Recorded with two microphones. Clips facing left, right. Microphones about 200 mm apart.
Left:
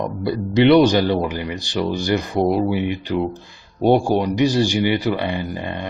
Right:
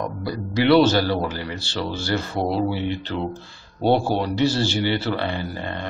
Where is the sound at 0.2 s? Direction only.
25° left (ahead or behind).